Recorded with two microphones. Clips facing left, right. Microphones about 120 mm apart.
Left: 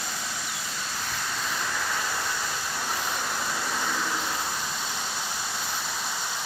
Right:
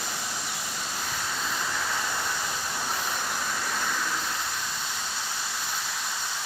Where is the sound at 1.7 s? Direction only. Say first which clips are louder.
Even; centre (ahead or behind).